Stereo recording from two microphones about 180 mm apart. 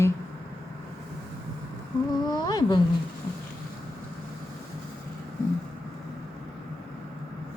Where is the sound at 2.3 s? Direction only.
25° left (ahead or behind).